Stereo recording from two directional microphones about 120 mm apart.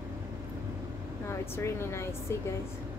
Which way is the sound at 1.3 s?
20° left (ahead or behind).